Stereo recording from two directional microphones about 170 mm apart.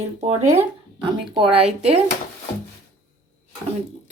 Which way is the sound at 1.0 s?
30° right (ahead or behind).